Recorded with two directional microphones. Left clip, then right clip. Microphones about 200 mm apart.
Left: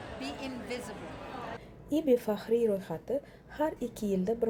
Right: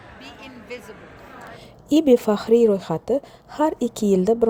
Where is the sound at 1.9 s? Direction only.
40° right (ahead or behind).